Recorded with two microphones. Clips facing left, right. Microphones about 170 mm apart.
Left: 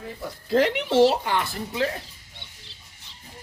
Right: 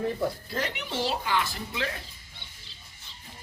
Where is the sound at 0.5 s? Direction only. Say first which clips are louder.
Left 12 dB; 90° left.